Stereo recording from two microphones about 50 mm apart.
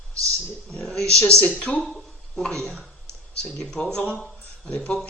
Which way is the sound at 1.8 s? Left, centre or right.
Centre.